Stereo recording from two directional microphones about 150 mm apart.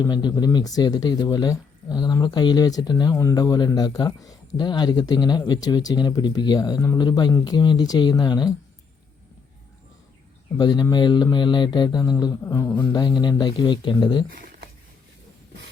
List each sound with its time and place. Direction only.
0.0 s speech: 30° left (ahead or behind)
10.6 s speech: 30° left (ahead or behind)
14.3 s a sound: 75° right (ahead or behind)